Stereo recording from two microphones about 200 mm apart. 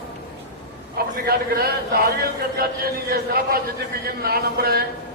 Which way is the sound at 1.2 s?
50° right (ahead or behind).